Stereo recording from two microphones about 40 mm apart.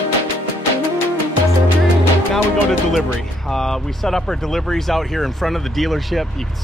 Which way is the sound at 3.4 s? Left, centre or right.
Centre.